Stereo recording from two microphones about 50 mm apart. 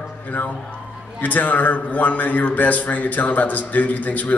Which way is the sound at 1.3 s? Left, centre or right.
Left.